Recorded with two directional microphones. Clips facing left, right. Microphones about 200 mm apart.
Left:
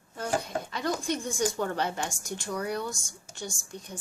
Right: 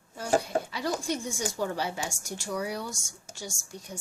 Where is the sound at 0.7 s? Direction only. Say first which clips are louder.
Left 1 dB; 10° right (ahead or behind).